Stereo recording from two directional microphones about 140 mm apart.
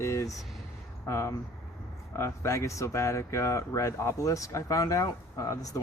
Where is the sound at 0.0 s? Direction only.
20° left (ahead or behind).